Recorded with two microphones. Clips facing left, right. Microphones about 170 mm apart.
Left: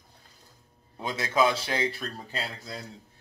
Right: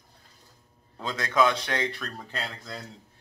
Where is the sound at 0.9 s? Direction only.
20° left (ahead or behind).